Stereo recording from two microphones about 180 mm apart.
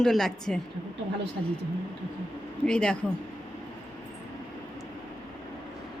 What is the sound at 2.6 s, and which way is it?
Speech, 5° left (ahead or behind).